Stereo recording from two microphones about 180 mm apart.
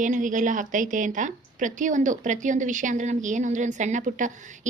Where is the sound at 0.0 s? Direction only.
45° right (ahead or behind).